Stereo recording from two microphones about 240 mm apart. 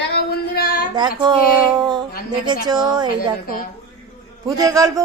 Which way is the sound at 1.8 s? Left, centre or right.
Centre.